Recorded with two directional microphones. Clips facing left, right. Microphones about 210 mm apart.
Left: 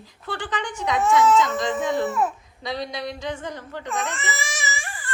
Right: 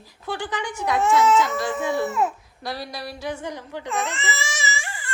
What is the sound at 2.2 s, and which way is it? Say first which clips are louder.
A woman's voice: even; centre (ahead or behind).